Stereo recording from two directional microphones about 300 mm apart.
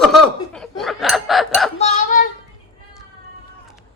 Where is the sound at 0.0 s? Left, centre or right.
Centre.